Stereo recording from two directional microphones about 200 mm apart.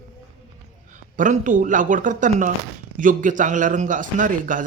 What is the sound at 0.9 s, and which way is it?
Speech, 40° right (ahead or behind).